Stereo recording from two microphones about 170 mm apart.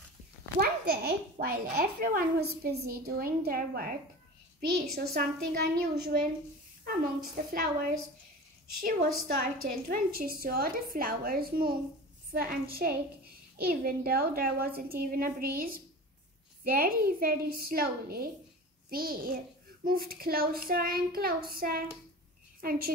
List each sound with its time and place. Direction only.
0.6 s a child's voice: 65° right (ahead or behind)
8.8 s a child's voice: 55° right (ahead or behind)